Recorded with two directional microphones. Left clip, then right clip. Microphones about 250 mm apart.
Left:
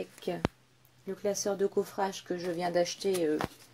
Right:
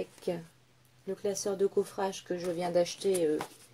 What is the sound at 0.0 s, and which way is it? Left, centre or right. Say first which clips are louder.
Speech: left 2 dB; centre.